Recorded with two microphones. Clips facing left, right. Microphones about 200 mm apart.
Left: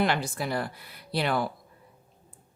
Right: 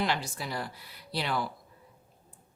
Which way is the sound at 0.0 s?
55° left (ahead or behind).